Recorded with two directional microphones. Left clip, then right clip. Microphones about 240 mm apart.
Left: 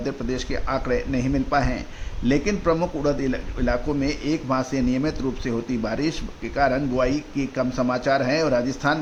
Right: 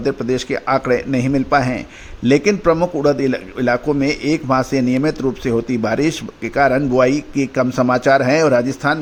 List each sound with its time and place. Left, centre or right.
0.0 s a man's voice: right